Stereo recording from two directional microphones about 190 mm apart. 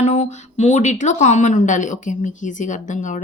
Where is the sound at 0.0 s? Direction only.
40° left (ahead or behind).